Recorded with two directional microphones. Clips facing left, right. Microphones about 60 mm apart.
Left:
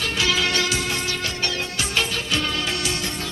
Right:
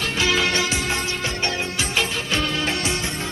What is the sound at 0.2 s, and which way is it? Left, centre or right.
Music, right.